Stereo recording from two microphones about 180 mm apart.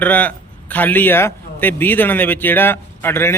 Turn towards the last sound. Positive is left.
turn(degrees=15)  # may be behind; listen again after turning